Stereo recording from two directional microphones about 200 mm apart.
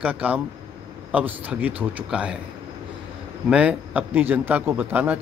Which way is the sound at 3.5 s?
5° right (ahead or behind).